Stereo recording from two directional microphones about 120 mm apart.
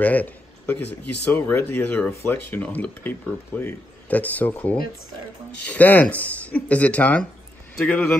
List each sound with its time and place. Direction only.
0.0 s a man's voice: 15° left (ahead or behind)